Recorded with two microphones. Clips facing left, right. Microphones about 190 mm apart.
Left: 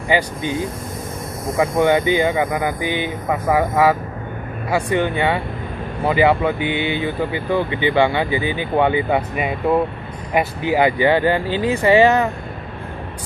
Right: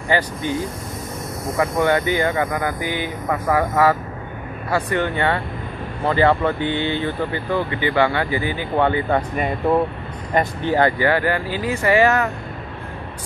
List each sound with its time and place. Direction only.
0.1 s speech: 15° left (ahead or behind)
1.6 s speech: 15° left (ahead or behind)